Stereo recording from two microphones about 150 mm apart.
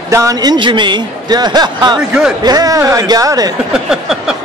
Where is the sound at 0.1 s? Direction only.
20° right (ahead or behind).